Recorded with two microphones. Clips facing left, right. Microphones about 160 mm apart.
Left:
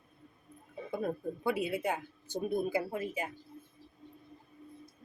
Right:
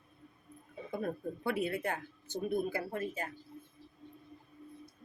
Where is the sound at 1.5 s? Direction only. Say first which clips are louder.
Left 2 dB; 10° left (ahead or behind).